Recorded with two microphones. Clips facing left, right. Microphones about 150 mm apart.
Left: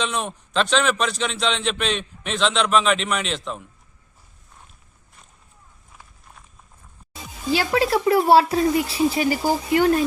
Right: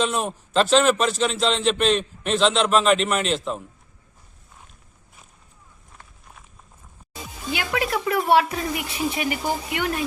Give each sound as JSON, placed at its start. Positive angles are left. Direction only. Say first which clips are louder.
{"t": 0.0, "sound": "a man's voice", "louder": "right 2 dB", "side_deg": 0}
{"t": 5.9, "sound": "walk", "louder": "even", "side_deg": 0}
{"t": 7.5, "sound": "speech", "louder": "left 5 dB", "side_deg": 30}